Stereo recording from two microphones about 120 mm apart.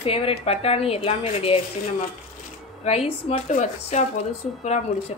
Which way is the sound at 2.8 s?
60° left (ahead or behind).